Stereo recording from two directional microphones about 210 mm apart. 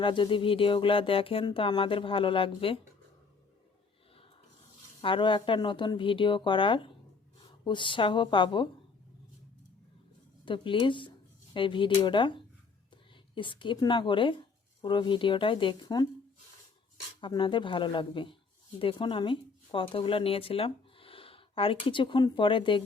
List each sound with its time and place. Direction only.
0.0 s speech: 25° left (ahead or behind)
5.0 s speech: 25° left (ahead or behind)
10.4 s speech: 25° left (ahead or behind)
17.2 s speech: 25° left (ahead or behind)